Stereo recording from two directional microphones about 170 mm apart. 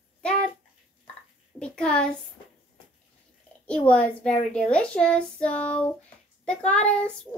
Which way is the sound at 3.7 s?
5° left (ahead or behind).